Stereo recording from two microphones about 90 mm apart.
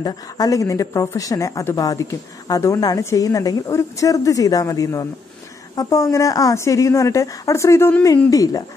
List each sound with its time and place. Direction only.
0.0 s a woman's voice: 40° left (ahead or behind)